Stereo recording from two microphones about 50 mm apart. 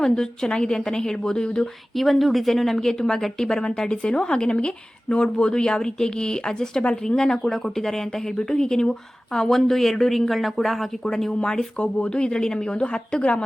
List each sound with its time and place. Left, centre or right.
0.0 s speech: centre
2.0 s speech: centre; by 13.4 s left